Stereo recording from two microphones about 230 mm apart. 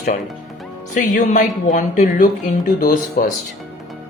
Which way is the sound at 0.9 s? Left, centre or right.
Left.